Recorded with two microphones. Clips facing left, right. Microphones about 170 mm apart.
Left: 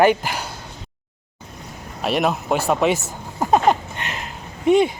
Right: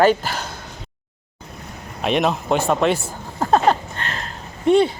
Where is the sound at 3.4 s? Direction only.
15° left (ahead or behind).